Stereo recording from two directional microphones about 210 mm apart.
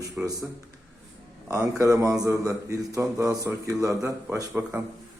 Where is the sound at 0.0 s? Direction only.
15° right (ahead or behind).